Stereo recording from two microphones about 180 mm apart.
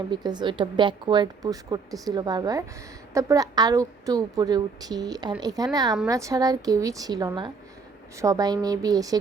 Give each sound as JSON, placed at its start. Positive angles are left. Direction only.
{"t": 0.1, "sound": "a woman's voice", "side_deg": -25}